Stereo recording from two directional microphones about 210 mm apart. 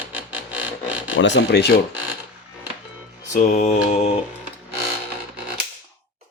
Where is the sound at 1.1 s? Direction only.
55° left (ahead or behind).